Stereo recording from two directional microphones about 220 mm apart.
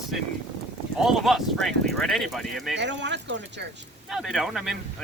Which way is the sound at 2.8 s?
55° right (ahead or behind).